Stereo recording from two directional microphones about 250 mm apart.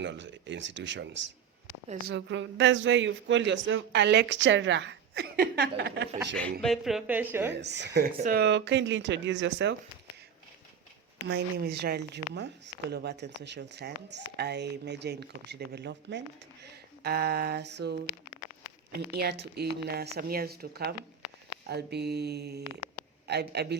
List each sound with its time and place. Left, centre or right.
0.0 s a man's voice: right
6.3 s speech: centre
7.5 s a man's voice: right
11.3 s a woman's voice: right
19.1 s a woman's voice: right